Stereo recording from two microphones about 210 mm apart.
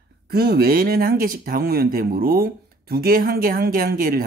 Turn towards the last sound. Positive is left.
turn(degrees=-45)  # may be behind; listen again after turning